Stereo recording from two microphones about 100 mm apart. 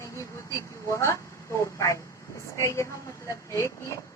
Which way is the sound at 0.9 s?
30° left (ahead or behind).